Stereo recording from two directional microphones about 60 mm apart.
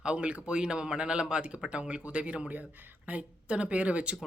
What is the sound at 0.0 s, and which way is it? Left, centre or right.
Speech, centre.